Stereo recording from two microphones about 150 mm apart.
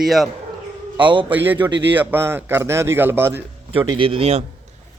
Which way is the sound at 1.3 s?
10° right (ahead or behind).